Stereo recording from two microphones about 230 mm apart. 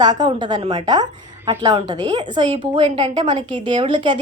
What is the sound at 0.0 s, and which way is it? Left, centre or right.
A woman's voice, centre.